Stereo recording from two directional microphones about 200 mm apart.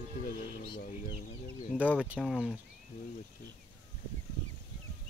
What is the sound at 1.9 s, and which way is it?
Speech, 5° right (ahead or behind).